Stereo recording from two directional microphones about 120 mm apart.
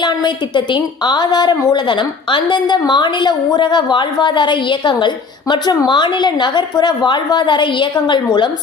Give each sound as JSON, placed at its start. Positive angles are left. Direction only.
{"t": 0.0, "sound": "a woman's voice", "side_deg": 40}